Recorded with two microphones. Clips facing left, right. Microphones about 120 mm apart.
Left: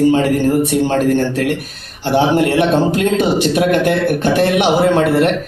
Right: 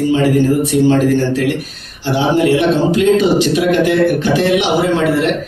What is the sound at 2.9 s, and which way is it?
A man's voice, 55° left (ahead or behind).